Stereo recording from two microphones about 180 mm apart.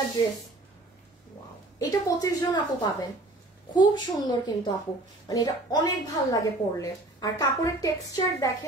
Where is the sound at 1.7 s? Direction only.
20° left (ahead or behind).